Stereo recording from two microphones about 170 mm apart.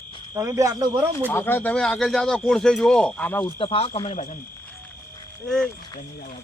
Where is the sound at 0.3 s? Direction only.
20° right (ahead or behind).